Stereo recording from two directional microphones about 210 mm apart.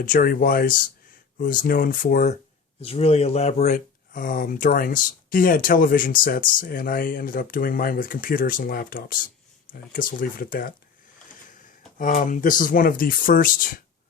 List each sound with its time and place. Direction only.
0.0 s speech: 40° left (ahead or behind)
2.8 s speech: 30° left (ahead or behind)
11.9 s speech: 40° left (ahead or behind)